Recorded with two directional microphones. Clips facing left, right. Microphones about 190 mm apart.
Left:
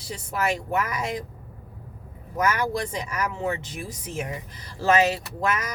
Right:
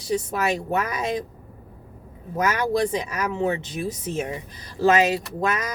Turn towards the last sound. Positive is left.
turn(degrees=-20)  # may be behind; listen again after turning